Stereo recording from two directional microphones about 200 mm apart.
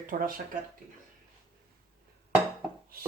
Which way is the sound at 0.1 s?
45° right (ahead or behind).